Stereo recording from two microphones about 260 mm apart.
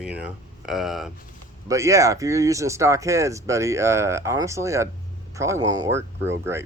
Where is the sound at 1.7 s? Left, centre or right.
Centre.